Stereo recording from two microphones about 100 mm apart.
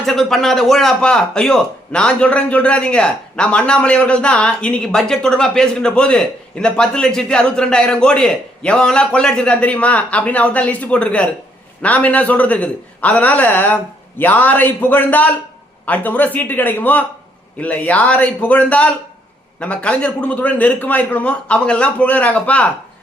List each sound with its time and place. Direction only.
0.0 s speech: 5° left (ahead or behind)